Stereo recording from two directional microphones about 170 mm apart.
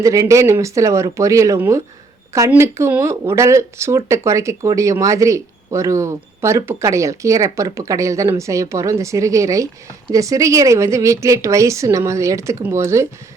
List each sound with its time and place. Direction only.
0.0 s speech: 20° right (ahead or behind)